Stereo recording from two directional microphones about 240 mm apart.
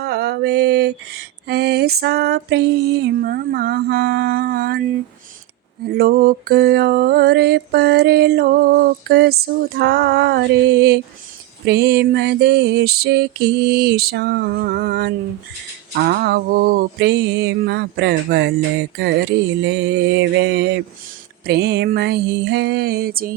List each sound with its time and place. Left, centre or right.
0.0 s mantra: right
5.9 s mantra: right